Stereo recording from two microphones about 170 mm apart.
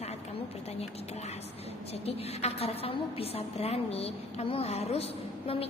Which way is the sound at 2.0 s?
35° left (ahead or behind).